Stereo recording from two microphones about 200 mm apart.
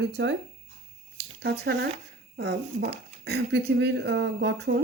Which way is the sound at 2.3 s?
55° right (ahead or behind).